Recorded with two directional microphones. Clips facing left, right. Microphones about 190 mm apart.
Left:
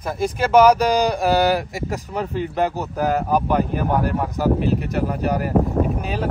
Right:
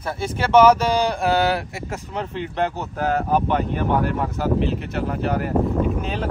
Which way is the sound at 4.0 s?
40° left (ahead or behind).